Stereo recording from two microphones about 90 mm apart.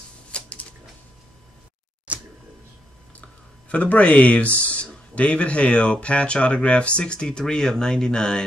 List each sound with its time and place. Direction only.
0.3 s a sound: 10° left (ahead or behind)
2.1 s camera: 15° right (ahead or behind)
3.2 s speech: 15° left (ahead or behind)